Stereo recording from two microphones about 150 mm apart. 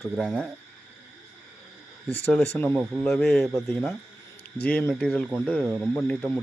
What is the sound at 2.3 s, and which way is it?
A man's voice, 5° left (ahead or behind).